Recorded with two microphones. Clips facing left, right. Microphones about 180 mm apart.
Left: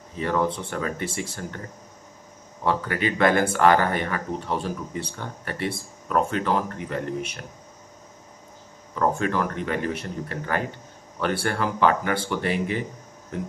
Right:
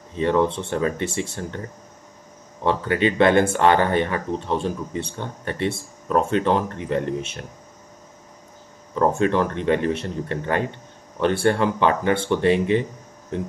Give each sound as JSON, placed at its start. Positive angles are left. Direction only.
{"t": 0.2, "sound": "speech", "side_deg": -25}
{"t": 2.6, "sound": "speech", "side_deg": -25}
{"t": 8.9, "sound": "speech", "side_deg": -25}